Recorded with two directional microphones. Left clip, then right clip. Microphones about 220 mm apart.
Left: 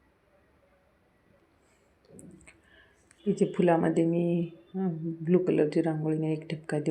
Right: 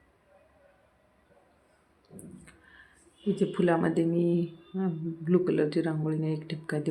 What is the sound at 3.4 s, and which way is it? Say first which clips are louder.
Speech: left 2 dB; 5° left (ahead or behind).